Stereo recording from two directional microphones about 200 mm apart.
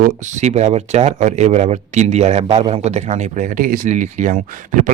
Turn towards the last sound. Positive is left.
turn(degrees=-40)  # may be behind; listen again after turning